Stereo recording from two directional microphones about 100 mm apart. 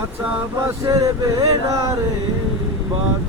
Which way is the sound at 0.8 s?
35° right (ahead or behind).